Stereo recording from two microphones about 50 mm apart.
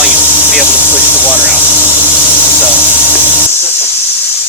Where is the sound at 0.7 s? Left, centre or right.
Left.